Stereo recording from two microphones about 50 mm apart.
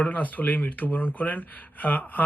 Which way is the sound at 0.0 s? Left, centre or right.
Left.